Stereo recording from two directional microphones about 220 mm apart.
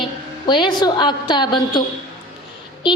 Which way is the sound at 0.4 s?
20° left (ahead or behind).